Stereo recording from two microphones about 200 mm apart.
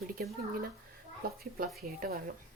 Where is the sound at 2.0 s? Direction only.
45° right (ahead or behind).